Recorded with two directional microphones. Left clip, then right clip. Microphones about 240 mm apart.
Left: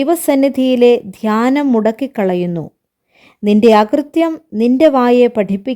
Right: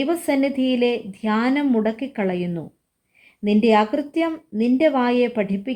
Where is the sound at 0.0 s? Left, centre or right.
Left.